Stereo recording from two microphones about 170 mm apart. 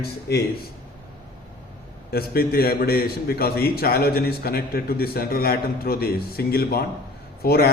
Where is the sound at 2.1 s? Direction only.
65° left (ahead or behind).